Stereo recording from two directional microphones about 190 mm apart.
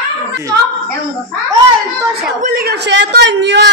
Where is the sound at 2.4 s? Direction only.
50° right (ahead or behind); by 3.7 s 65° right (ahead or behind).